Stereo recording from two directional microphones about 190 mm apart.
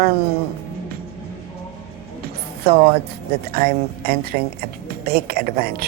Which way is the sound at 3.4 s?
55° right (ahead or behind).